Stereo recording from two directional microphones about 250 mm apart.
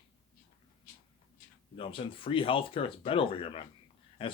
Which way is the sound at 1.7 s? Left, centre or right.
Left.